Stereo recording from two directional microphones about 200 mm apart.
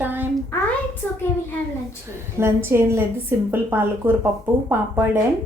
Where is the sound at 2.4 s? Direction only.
10° right (ahead or behind).